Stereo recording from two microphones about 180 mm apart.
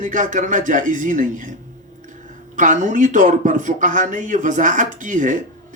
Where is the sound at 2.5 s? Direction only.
45° right (ahead or behind).